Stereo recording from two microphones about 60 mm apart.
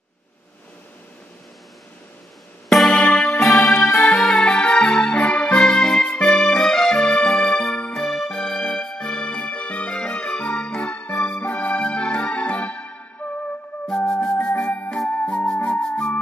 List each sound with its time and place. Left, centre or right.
2.9 s music: centre
3.8 s music: left
4.1 s music: centre
13.8 s music: centre